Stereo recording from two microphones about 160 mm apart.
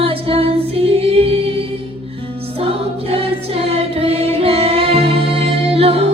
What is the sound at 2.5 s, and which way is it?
Choir, 35° right (ahead or behind).